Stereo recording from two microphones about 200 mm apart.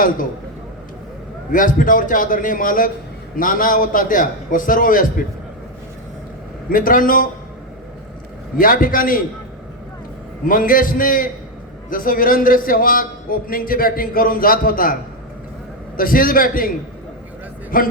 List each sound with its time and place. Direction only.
1.5 s speech: 40° left (ahead or behind)
6.7 s speech: 45° left (ahead or behind)
8.5 s speech: 45° left (ahead or behind)
10.4 s speech: 45° left (ahead or behind)
16.0 s speech: 45° left (ahead or behind)
17.7 s speech: 45° left (ahead or behind)